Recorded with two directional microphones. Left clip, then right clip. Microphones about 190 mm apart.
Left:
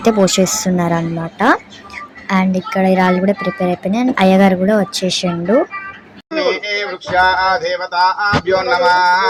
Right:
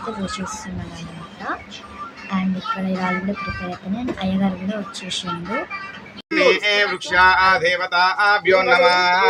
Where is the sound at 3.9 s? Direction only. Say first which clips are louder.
Left 13 dB; 40° left (ahead or behind).